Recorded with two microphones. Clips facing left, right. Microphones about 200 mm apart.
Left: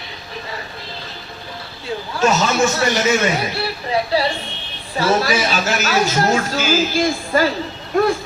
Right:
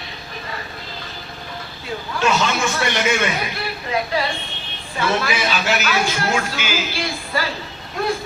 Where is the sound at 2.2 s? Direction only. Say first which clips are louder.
Left 3 dB; 40° left (ahead or behind).